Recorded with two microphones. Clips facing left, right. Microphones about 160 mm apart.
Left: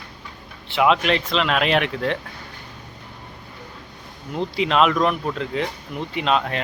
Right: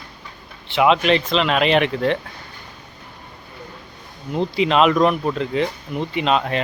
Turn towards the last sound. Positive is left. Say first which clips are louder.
# right 2 dB
turn(degrees=0)  # may be behind; listen again after turning